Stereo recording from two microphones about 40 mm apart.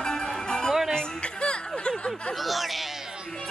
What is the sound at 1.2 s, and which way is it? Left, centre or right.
Music, left.